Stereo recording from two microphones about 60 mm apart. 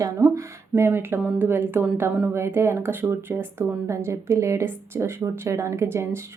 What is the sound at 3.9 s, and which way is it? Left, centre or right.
Speech, right.